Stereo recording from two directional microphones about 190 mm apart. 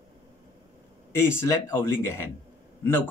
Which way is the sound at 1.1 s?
10° left (ahead or behind).